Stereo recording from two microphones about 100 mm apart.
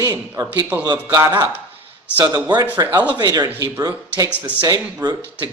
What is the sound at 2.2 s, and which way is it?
A man's voice, 40° right (ahead or behind).